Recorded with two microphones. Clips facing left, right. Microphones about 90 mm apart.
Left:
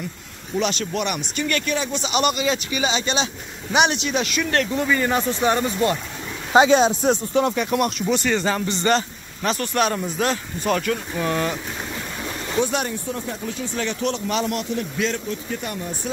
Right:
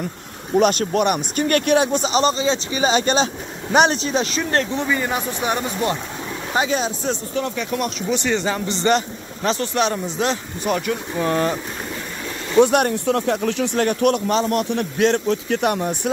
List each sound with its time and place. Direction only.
0.6 s speech: 45° right (ahead or behind)
2.1 s speech: 30° right (ahead or behind)
2.9 s speech: 45° right (ahead or behind); by 4.8 s 30° right (ahead or behind)
4.8 s speech: 10° right (ahead or behind)
6.5 s speech: 25° left (ahead or behind)
8.2 s speech: 20° right (ahead or behind)
11.2 s speech: 30° right (ahead or behind)
12.5 s speech: 55° right (ahead or behind); by 13.7 s 80° right
13.7 s speech: 50° right (ahead or behind)
14.7 s speech: 60° right (ahead or behind)